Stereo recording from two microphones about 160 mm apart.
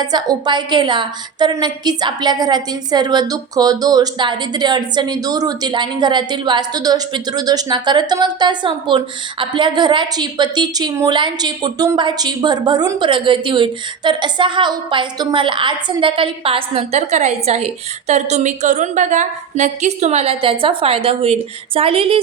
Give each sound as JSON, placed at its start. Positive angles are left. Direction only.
{"t": 0.0, "sound": "a woman's voice", "side_deg": -25}